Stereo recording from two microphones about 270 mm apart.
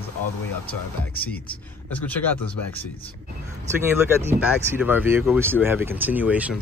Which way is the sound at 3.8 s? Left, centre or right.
Centre.